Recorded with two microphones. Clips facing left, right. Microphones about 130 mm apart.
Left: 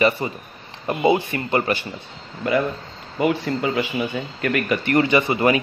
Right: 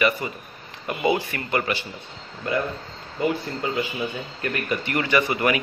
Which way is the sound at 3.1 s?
85° left.